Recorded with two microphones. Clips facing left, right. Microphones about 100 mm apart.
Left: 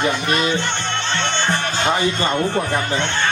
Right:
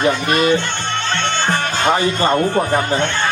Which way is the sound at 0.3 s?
40° right (ahead or behind).